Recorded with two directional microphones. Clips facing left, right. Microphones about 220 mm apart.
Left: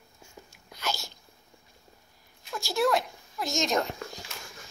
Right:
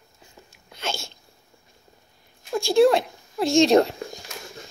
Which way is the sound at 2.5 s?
25° right (ahead or behind).